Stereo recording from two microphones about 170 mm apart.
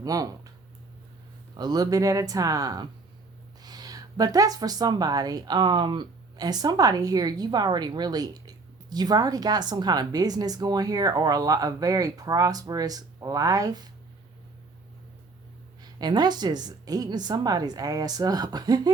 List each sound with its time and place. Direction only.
0.0 s speech: 20° right (ahead or behind)
1.5 s speech: 25° right (ahead or behind)
15.8 s speech: 25° right (ahead or behind)